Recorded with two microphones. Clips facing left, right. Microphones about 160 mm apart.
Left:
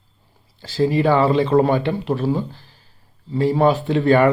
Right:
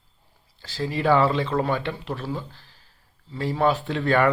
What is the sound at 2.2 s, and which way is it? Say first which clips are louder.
Speech: left 10 dB; 25° left (ahead or behind).